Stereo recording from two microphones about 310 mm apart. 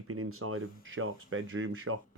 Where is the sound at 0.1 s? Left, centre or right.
Right.